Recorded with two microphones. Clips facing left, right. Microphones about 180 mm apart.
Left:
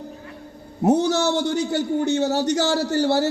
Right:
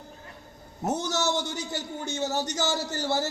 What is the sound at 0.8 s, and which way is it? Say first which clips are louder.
A man's voice: left 10 dB; 60° left (ahead or behind).